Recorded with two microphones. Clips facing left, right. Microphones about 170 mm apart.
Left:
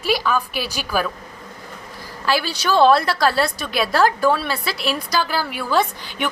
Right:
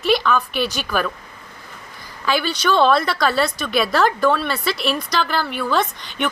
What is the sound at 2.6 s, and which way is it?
Speech, 35° left (ahead or behind).